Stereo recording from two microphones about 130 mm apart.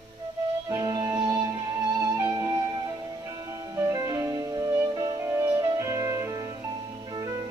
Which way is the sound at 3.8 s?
25° right (ahead or behind).